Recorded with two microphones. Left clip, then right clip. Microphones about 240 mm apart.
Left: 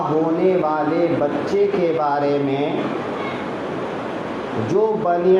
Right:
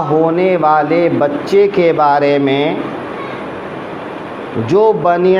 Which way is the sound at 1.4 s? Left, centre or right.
Right.